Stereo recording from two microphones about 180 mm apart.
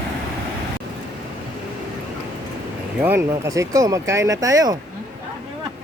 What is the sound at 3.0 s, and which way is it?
Speech, 15° right (ahead or behind).